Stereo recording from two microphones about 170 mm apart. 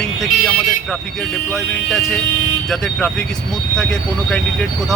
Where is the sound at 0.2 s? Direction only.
Centre (ahead or behind).